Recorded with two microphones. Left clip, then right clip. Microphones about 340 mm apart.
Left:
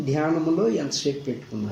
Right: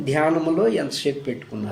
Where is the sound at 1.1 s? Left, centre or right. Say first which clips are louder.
Right 2 dB; right.